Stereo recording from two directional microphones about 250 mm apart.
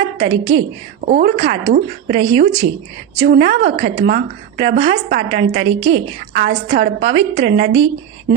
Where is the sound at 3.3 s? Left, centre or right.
Right.